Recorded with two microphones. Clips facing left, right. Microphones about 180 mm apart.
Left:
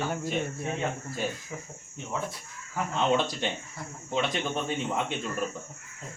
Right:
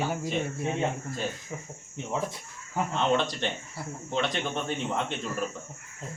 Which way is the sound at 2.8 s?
25° right (ahead or behind).